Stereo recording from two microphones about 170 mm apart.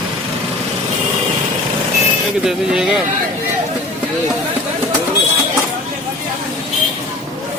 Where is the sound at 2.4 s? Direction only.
5° right (ahead or behind).